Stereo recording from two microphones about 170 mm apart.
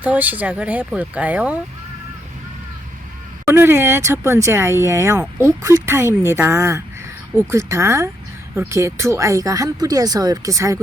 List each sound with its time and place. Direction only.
0.0 s speech: 10° right (ahead or behind)
3.4 s speech: 15° right (ahead or behind)